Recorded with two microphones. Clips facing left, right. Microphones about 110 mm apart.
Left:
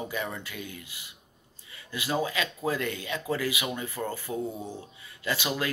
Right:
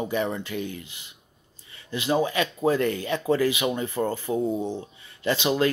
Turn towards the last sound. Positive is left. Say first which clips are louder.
# right 7 dB
turn(degrees=-25)  # may be behind; listen again after turning